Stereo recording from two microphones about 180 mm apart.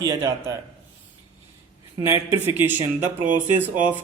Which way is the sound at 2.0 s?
15° right (ahead or behind).